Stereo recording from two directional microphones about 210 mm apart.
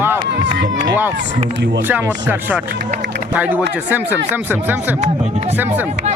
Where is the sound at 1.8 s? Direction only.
10° right (ahead or behind).